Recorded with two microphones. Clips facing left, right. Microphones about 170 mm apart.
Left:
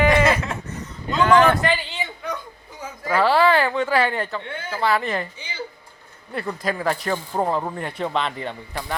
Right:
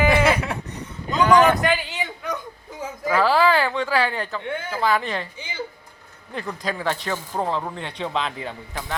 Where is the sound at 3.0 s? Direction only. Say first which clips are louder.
Left 1 dB; centre (ahead or behind).